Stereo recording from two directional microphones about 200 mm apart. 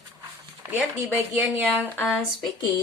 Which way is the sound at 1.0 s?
10° right (ahead or behind).